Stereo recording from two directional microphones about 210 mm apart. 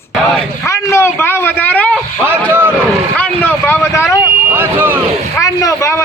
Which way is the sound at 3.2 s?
10° left (ahead or behind).